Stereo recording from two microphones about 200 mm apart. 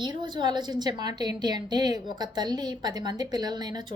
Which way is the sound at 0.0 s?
20° right (ahead or behind).